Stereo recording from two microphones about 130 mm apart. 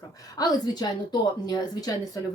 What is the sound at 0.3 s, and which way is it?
Speech, 30° left (ahead or behind).